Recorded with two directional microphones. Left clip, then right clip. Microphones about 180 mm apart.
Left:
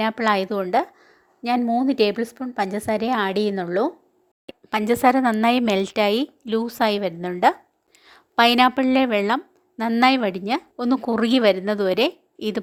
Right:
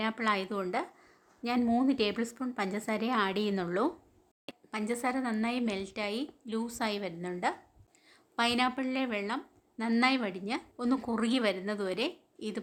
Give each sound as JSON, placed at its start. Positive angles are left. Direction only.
{"t": 0.0, "sound": "a woman's voice", "side_deg": 35}
{"t": 4.7, "sound": "a woman's voice", "side_deg": 45}